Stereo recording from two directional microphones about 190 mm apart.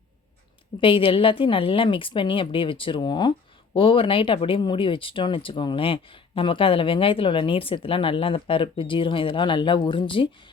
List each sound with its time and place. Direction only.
0.8 s speech: 30° left (ahead or behind)